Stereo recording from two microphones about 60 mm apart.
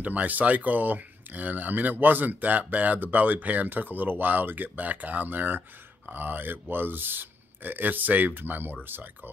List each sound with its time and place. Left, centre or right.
0.0 s speech: right